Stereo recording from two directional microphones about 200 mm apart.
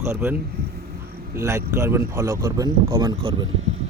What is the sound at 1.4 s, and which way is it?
Speech, 15° right (ahead or behind).